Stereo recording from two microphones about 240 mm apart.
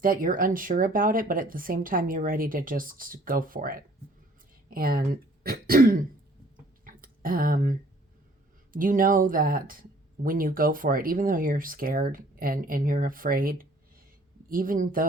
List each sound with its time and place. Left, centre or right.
0.0 s speech: right
6.8 s a sound: right
8.7 s speech: right